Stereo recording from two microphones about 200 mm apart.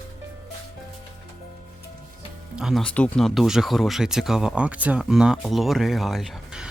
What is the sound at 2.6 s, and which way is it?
Speech, centre (ahead or behind).